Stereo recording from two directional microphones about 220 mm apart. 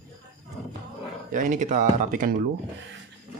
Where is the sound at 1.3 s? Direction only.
35° right (ahead or behind).